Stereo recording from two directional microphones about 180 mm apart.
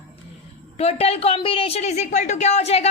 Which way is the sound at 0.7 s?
35° left (ahead or behind).